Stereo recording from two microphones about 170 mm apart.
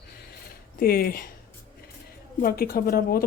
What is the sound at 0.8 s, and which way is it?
Speech, 60° left (ahead or behind).